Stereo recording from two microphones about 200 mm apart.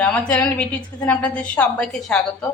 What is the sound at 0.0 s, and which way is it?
A woman's voice, 5° left (ahead or behind).